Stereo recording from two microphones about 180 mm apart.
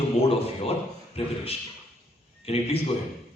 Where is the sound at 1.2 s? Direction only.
35° left (ahead or behind).